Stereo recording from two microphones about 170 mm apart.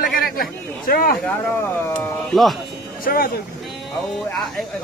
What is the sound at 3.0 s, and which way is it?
Speech, 55° left (ahead or behind).